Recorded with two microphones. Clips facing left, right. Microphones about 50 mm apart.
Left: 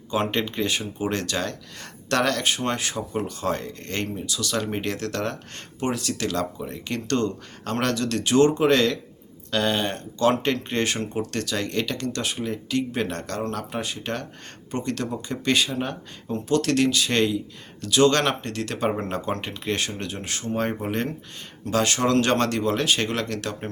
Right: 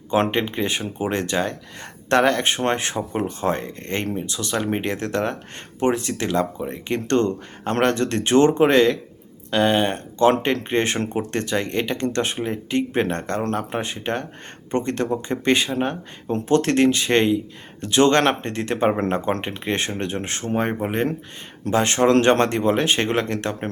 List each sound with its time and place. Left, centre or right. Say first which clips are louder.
0.1 s speech: right 4 dB; right